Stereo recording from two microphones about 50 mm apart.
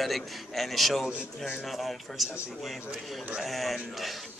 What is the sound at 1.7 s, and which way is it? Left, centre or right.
Speech, centre.